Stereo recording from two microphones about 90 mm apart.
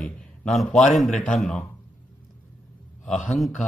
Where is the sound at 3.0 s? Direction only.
Centre (ahead or behind).